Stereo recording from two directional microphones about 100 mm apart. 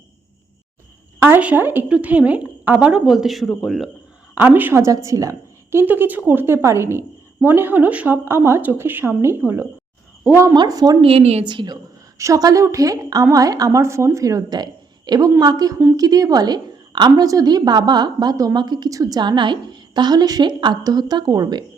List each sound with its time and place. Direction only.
1.2 s a woman's voice: 15° right (ahead or behind); by 3.8 s centre (ahead or behind)
4.4 s a woman's voice: 20° right (ahead or behind)
5.8 s speech: 15° right (ahead or behind)
10.5 s a woman's voice: 45° right (ahead or behind)
11.0 s a woman's voice: 85° right
11.4 s a woman's voice: 50° right (ahead or behind)
12.1 s a woman's voice: 35° right (ahead or behind)